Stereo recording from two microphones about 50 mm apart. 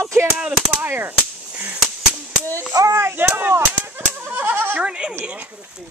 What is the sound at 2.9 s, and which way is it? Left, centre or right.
Speech, right.